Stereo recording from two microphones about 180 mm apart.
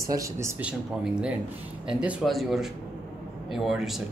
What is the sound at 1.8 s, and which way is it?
Speech, 5° right (ahead or behind).